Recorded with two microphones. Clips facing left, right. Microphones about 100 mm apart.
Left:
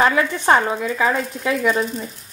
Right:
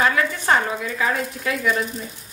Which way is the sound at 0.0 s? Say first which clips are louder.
Left 3 dB; 25° left (ahead or behind).